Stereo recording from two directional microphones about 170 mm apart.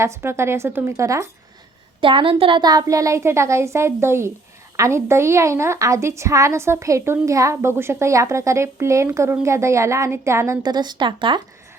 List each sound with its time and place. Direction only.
0.0 s a woman's voice: 15° right (ahead or behind)
2.0 s a woman's voice: 30° right (ahead or behind)